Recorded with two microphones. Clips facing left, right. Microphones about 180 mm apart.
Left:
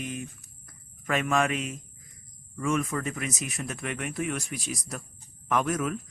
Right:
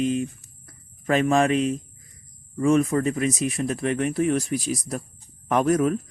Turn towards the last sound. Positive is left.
turn(degrees=-35)  # may be behind; listen again after turning